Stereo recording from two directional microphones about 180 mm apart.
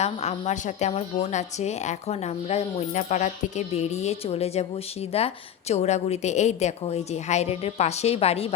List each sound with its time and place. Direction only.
0.0 s a woman's voice: 35° left (ahead or behind)